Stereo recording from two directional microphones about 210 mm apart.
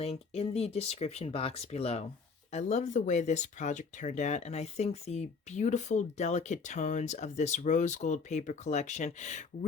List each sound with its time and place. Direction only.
0.0 s speech: 30° left (ahead or behind)